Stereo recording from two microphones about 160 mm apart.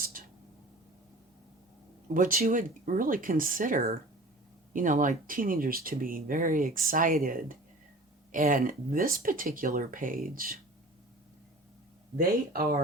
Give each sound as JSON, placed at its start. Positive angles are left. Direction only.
{"t": 0.1, "sound": "a sound", "side_deg": -60}
{"t": 2.1, "sound": "speech", "side_deg": -60}
{"t": 12.1, "sound": "speech", "side_deg": -65}